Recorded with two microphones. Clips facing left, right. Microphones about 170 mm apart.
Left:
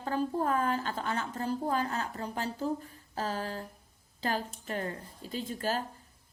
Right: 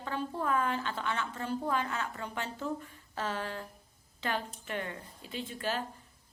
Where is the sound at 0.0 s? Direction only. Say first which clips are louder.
Left 4 dB; 40° left (ahead or behind).